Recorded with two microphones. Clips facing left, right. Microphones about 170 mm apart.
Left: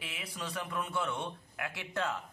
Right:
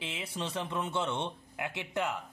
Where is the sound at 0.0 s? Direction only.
25° right (ahead or behind).